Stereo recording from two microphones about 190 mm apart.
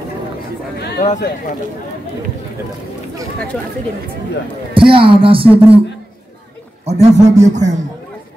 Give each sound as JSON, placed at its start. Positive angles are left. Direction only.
{"t": 0.7, "sound": "a sound", "side_deg": 55}
{"t": 4.7, "sound": "speech", "side_deg": -25}
{"t": 6.8, "sound": "a man's voice", "side_deg": -35}